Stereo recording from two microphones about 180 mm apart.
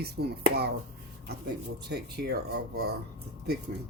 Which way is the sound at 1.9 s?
65° right (ahead or behind).